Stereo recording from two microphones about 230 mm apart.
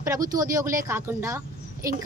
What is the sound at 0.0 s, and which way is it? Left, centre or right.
Speech, centre.